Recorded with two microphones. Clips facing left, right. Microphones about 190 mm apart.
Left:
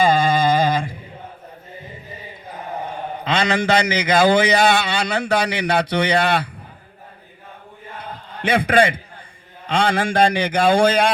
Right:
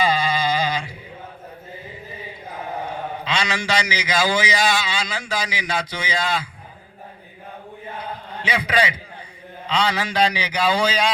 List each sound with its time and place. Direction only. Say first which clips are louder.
0.0 s a sound: left 5 dB; 50° left (ahead or behind)
3.2 s a man's voice: left 7 dB; 55° left (ahead or behind)
8.4 s a man's voice: left 6 dB; 55° left (ahead or behind)